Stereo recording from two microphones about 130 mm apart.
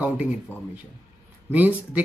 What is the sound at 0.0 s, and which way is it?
Speech, 10° right (ahead or behind).